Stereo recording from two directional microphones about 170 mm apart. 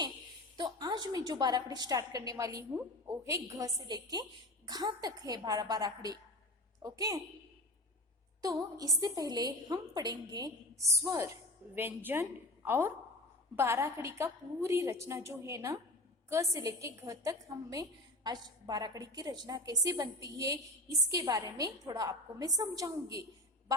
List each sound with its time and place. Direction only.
0.5 s a woman's voice: 25° right (ahead or behind)
8.4 s a woman's voice: 20° right (ahead or behind)